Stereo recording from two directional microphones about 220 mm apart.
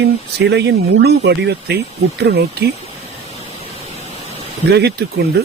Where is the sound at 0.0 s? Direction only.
50° right (ahead or behind).